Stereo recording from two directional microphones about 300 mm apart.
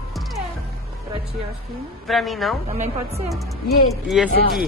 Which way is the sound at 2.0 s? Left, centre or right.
Centre.